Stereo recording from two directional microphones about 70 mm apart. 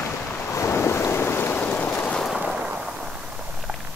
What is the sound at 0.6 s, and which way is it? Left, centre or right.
Wind noise, left.